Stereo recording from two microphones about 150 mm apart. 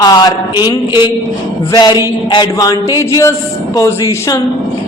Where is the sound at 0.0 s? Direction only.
25° left (ahead or behind).